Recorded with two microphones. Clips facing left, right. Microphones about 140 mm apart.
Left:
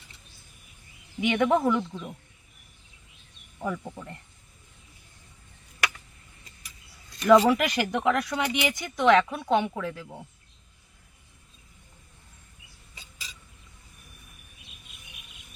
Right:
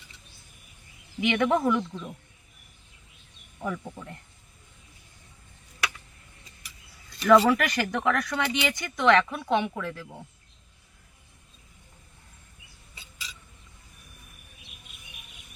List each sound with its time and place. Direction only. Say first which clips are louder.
1.3 s speech: left 1 dB; 5° left (ahead or behind)
3.6 s speech: left 1 dB; 5° left (ahead or behind)
7.3 s speech: left 1 dB; 15° left (ahead or behind)